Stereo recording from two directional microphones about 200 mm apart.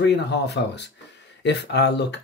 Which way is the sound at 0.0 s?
55° left (ahead or behind).